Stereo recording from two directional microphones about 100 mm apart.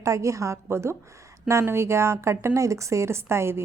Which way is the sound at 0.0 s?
30° right (ahead or behind).